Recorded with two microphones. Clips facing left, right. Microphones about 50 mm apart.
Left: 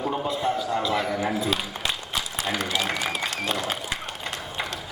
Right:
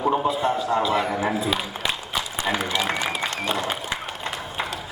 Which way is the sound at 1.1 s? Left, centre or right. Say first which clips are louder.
Right 2 dB; centre.